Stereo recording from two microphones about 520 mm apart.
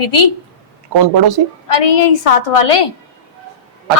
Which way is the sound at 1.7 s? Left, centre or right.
Left.